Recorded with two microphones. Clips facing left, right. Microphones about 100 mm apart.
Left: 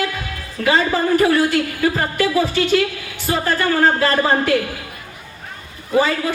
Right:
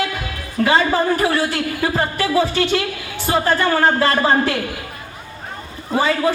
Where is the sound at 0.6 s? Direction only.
35° right (ahead or behind).